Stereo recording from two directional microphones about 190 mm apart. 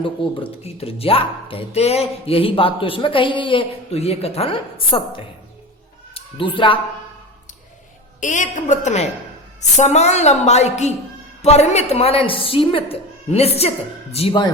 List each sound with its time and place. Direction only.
0.0 s speech: 25° left (ahead or behind)
8.2 s a woman's voice: 40° left (ahead or behind)